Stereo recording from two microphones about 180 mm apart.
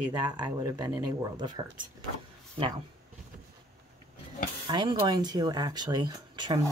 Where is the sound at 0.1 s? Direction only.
25° right (ahead or behind).